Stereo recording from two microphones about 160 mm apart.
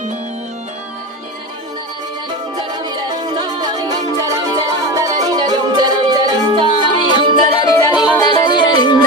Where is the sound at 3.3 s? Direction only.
25° right (ahead or behind).